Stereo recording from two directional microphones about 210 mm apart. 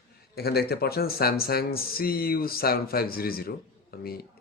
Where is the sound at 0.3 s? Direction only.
50° left (ahead or behind).